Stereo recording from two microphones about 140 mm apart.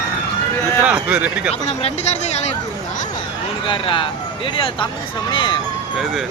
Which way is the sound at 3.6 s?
35° left (ahead or behind).